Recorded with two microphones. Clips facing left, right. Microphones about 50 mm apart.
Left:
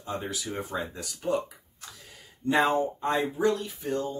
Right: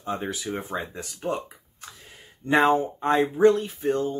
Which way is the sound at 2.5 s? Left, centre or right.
Right.